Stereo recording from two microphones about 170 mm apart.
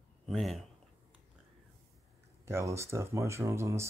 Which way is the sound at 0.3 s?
Centre (ahead or behind).